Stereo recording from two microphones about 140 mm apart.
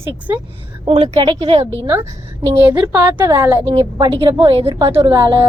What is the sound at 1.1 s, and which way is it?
Speech, 30° right (ahead or behind).